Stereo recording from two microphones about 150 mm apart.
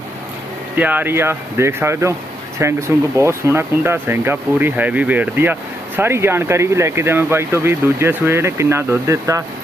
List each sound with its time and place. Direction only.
0.8 s speech: 10° right (ahead or behind)